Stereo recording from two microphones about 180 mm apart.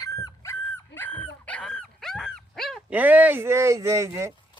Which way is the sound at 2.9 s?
10° right (ahead or behind).